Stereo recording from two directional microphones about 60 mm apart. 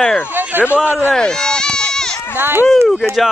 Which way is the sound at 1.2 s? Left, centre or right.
Centre.